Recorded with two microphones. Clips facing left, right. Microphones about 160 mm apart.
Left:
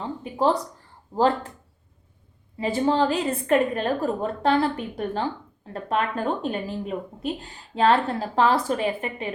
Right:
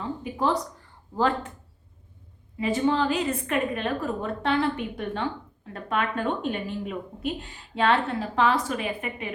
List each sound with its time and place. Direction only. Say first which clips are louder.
0.0 s a woman's voice: left 4 dB; 30° left (ahead or behind)
2.6 s a woman's voice: left 2 dB; 35° left (ahead or behind)